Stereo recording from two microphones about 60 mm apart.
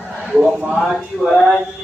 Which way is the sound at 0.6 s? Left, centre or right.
Centre.